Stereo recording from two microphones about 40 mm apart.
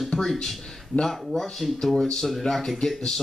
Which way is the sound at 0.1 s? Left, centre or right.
Centre.